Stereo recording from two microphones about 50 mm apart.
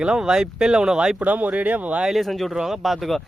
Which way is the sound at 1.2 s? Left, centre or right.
Right.